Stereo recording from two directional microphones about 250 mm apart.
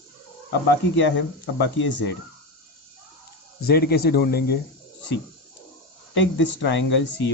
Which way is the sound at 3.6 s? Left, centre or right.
Left.